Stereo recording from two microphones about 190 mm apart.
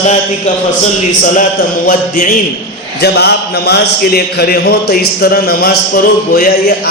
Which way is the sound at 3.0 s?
60° left (ahead or behind).